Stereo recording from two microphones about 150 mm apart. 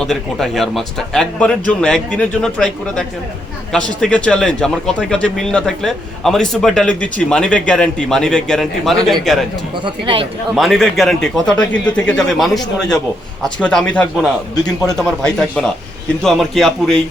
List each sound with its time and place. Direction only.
0.0 s a man's voice: 5° left (ahead or behind)
9.8 s speech: 35° right (ahead or behind)
10.5 s a man's voice: centre (ahead or behind)